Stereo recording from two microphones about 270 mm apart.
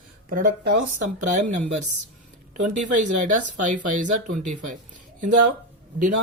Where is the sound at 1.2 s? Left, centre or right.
Right.